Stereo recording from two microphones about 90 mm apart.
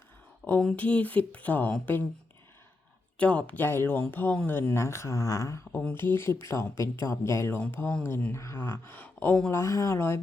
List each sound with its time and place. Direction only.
0.6 s speech: 10° left (ahead or behind)
3.2 s speech: 15° left (ahead or behind); by 5.6 s 35° left (ahead or behind)
5.9 s speech: 25° left (ahead or behind)
9.0 s speech: 15° left (ahead or behind)
9.5 s speech: 35° left (ahead or behind)